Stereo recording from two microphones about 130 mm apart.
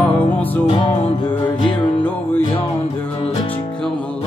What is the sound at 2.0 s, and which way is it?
Music, 15° left (ahead or behind).